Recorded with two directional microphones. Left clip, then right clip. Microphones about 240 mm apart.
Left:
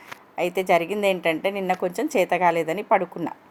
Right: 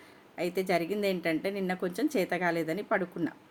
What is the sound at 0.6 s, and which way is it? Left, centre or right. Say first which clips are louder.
A woman's voice: left 9 dB; centre.